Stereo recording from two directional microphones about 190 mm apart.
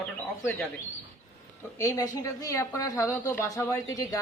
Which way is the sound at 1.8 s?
15° left (ahead or behind).